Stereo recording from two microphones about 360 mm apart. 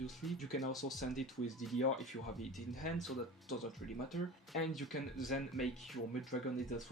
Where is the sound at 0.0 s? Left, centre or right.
Centre.